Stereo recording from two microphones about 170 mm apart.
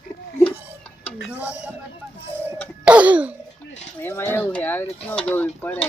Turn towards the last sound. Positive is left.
turn(degrees=10)  # may be behind; listen again after turning